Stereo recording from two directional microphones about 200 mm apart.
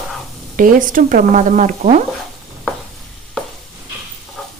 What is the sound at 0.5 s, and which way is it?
Speech, 45° right (ahead or behind).